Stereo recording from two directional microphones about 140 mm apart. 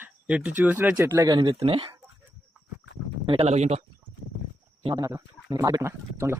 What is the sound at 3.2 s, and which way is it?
Speech, 40° right (ahead or behind).